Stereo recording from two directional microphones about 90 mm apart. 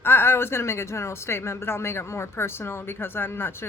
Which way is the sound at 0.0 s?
25° left (ahead or behind).